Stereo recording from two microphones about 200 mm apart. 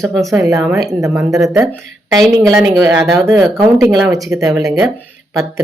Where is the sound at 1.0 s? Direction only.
15° right (ahead or behind).